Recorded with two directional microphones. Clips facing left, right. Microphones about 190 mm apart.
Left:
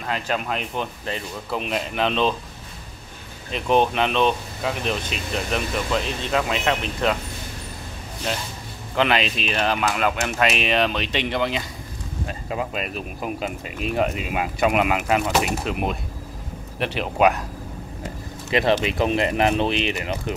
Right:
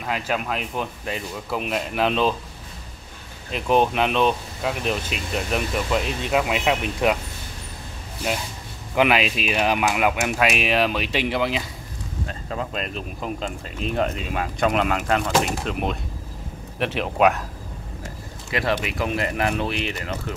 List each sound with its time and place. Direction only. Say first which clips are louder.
0.0 s speech: even; 5° right (ahead or behind)
3.5 s speech: even; 5° right (ahead or behind)
8.3 s speech: right 1 dB; 10° right (ahead or behind)
12.3 s speech: left 2 dB; 10° left (ahead or behind)
18.5 s speech: left 4 dB; 25° left (ahead or behind)